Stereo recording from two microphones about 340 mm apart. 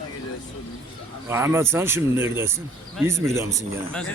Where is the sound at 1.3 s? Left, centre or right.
Centre.